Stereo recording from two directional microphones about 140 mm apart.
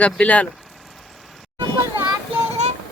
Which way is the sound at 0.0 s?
10° left (ahead or behind).